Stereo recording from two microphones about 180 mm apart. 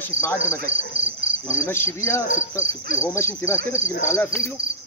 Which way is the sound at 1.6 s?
15° left (ahead or behind).